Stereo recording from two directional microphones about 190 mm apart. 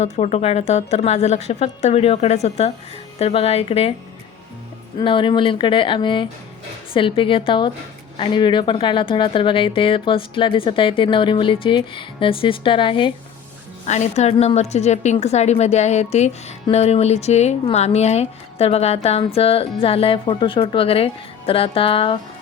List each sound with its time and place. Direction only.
0.0 s speech: 35° left (ahead or behind)
4.9 s a woman's voice: 25° left (ahead or behind)
13.8 s speech: 40° left (ahead or behind)